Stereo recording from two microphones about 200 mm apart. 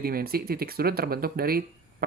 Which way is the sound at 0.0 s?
45° right (ahead or behind).